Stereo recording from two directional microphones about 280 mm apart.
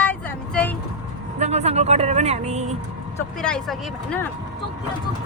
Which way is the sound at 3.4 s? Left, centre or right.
Centre.